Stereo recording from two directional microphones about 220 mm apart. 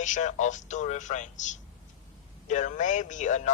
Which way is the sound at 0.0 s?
35° left (ahead or behind).